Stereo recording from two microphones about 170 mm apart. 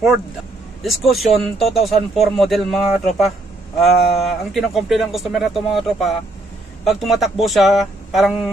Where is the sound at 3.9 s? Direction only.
70° left (ahead or behind).